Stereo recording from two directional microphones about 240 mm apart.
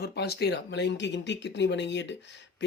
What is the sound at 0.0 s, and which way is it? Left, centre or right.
Speech, left.